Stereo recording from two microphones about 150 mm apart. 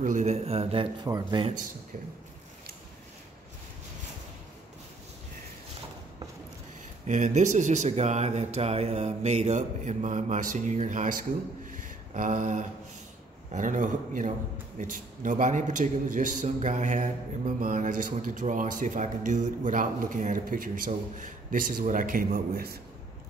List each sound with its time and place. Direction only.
0.0 s speech: 55° right (ahead or behind)
1.0 s speech: 25° right (ahead or behind)
7.1 s a man's voice: 55° right (ahead or behind); by 22.8 s 85° right